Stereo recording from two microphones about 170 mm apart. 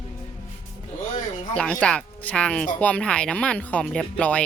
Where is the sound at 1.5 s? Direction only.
5° left (ahead or behind).